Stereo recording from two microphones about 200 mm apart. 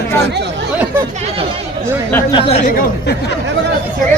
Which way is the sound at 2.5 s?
45° left (ahead or behind).